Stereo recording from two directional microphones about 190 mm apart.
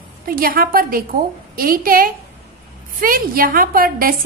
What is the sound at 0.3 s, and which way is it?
A woman's voice, 50° right (ahead or behind).